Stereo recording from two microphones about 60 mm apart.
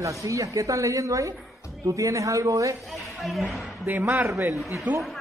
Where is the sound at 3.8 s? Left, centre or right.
Right.